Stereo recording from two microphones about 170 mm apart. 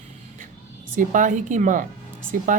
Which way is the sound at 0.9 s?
50° right (ahead or behind).